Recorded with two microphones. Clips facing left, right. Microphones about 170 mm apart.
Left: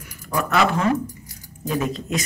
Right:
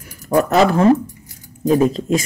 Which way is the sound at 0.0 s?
40° right (ahead or behind).